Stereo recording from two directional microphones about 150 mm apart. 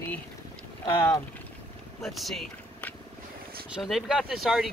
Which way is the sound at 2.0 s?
Centre (ahead or behind).